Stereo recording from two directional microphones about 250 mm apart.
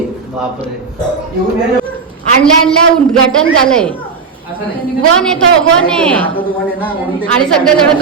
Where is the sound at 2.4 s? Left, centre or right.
Centre.